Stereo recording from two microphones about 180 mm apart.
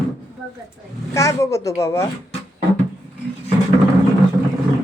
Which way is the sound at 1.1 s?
15° left (ahead or behind).